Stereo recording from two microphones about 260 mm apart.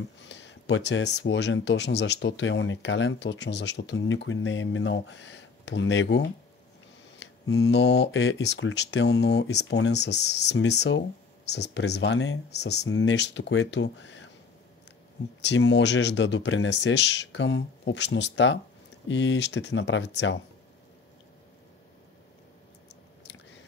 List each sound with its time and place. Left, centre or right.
0.2 s speech: left
7.4 s speech: centre
7.7 s speech: left
15.4 s speech: left